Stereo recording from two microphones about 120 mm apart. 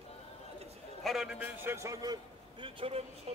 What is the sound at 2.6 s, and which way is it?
Speech, 55° right (ahead or behind).